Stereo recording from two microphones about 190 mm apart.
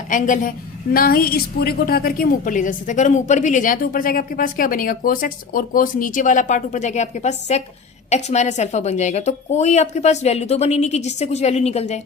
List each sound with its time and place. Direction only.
0.1 s a woman's voice: 45° left (ahead or behind)